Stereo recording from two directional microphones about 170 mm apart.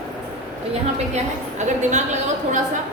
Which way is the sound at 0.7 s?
40° right (ahead or behind).